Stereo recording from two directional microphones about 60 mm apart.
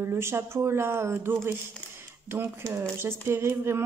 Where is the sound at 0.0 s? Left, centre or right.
Right.